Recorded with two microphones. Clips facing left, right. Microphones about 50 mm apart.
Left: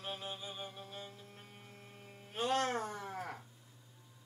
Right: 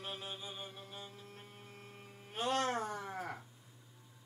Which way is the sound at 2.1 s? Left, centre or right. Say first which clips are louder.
Left 1 dB; centre.